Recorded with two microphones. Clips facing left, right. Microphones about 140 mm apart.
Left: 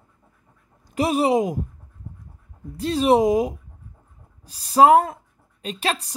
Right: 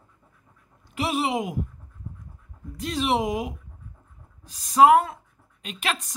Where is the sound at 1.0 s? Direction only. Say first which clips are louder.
Left 6 dB; 40° left (ahead or behind).